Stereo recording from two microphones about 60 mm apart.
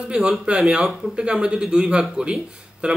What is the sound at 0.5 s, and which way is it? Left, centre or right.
A man's voice, centre.